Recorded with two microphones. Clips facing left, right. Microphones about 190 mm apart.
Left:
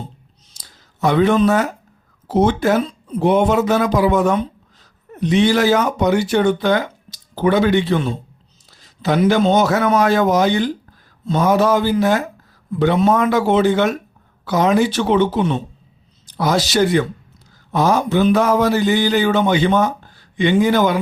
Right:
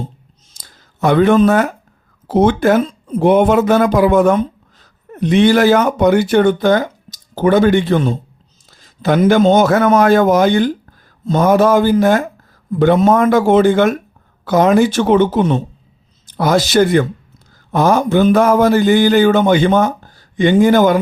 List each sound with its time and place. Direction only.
0.5 s clicking: 50° right (ahead or behind)
2.2 s speech: 55° right (ahead or behind)